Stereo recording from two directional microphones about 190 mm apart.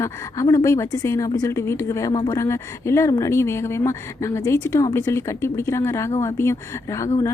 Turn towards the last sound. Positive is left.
turn(degrees=15)  # may be behind; listen again after turning